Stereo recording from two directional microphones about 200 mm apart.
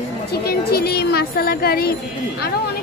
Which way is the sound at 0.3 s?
50° left (ahead or behind).